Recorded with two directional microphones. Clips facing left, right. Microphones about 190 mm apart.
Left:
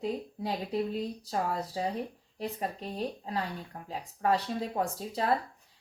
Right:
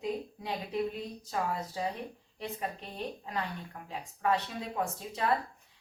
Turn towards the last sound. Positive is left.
turn(degrees=35)  # may be behind; listen again after turning